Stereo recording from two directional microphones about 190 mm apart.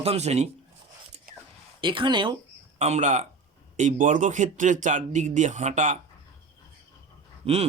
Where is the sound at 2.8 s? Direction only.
35° right (ahead or behind).